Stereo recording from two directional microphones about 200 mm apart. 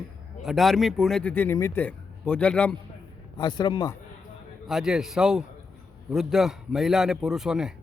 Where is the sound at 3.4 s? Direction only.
20° left (ahead or behind).